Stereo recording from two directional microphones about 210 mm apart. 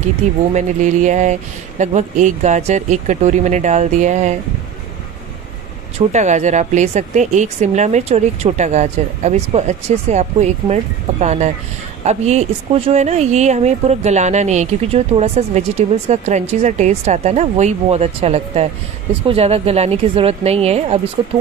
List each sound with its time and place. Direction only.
0.5 s speech: 35° right (ahead or behind)
5.9 s a woman's voice: 35° right (ahead or behind)